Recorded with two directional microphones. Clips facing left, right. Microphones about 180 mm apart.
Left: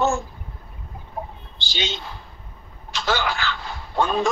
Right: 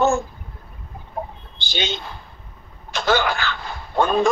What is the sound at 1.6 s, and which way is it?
A man's voice, 55° right (ahead or behind).